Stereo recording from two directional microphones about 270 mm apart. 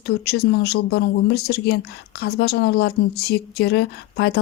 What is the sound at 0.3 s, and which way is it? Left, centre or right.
A woman's voice, left.